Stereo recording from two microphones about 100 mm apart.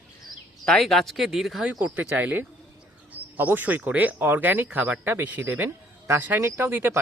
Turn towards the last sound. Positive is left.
turn(degrees=-20)  # may be behind; listen again after turning